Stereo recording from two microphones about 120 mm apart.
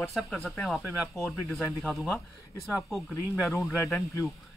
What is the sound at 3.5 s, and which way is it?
Speech, 5° left (ahead or behind).